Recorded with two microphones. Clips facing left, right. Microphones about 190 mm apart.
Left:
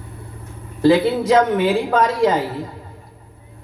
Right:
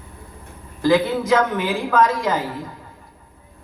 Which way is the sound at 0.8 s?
30° left (ahead or behind).